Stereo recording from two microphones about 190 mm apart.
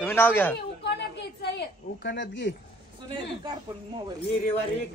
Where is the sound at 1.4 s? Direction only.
60° left (ahead or behind).